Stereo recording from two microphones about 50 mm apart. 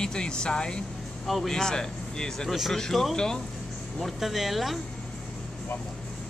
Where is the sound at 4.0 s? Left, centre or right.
Centre.